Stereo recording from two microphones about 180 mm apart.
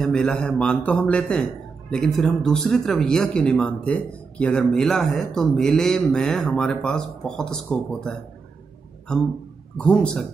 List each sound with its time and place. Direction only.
0.0 s a man's voice: 5° left (ahead or behind)